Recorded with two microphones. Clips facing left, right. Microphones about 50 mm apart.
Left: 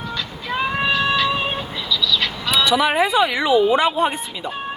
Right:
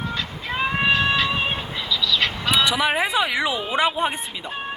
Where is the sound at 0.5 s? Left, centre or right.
Right.